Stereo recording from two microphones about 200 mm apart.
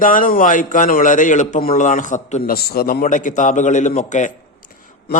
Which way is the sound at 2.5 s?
50° left (ahead or behind).